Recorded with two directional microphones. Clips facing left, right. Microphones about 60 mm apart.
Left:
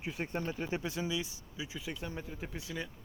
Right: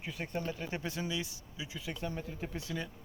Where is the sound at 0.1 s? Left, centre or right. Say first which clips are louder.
Left 1 dB; left.